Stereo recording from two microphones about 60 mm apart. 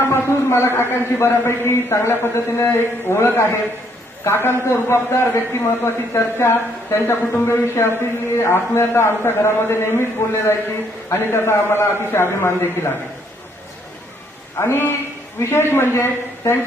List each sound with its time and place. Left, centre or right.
0.0 s a man's voice: left
14.6 s a man's voice: left